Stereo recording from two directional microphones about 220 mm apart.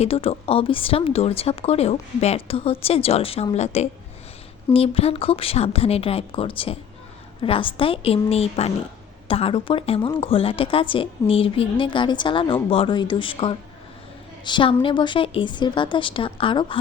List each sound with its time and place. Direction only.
0.0 s a woman's voice: 25° left (ahead or behind)